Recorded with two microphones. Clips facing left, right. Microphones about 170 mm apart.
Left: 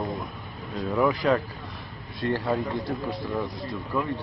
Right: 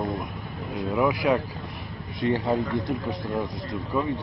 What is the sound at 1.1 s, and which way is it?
A man's voice, 15° right (ahead or behind).